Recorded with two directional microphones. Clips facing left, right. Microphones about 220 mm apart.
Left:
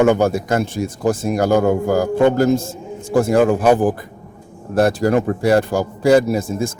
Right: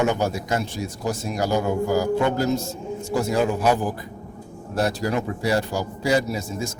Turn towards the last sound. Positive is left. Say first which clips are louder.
# left 8 dB
turn(degrees=55)  # may be behind; listen again after turning